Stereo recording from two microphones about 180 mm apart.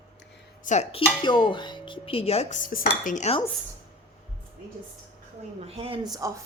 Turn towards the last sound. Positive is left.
turn(degrees=-15)  # may be behind; listen again after turning